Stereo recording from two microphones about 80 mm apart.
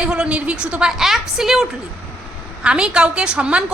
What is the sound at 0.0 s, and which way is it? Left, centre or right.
A woman's voice, centre.